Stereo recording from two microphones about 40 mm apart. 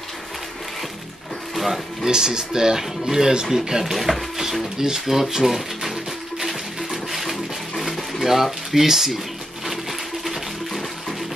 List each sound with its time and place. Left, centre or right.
1.5 s music: centre
2.0 s speech: centre
6.4 s a sound: centre